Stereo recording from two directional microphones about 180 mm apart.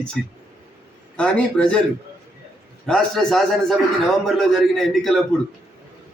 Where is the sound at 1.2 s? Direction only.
5° left (ahead or behind).